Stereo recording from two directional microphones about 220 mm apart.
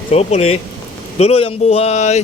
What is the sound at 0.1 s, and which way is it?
Speech, 30° left (ahead or behind).